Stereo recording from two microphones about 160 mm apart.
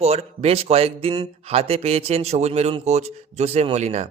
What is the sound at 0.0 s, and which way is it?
Speech, 40° right (ahead or behind).